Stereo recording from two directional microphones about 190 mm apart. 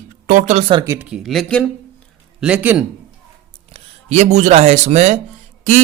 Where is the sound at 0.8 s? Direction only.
10° right (ahead or behind).